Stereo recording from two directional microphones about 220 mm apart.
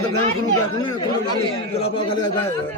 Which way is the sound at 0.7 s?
20° left (ahead or behind).